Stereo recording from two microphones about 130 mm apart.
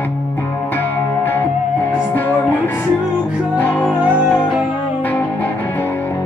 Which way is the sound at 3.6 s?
10° left (ahead or behind).